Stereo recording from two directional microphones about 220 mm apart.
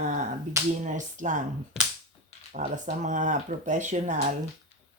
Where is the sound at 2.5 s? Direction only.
35° right (ahead or behind).